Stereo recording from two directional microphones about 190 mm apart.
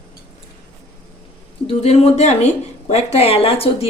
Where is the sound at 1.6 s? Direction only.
35° left (ahead or behind).